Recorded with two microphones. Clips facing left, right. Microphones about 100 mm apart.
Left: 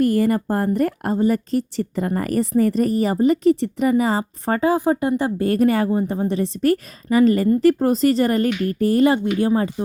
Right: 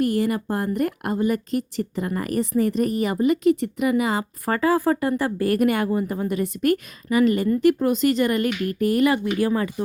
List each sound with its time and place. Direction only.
0.0 s speech: 40° left (ahead or behind)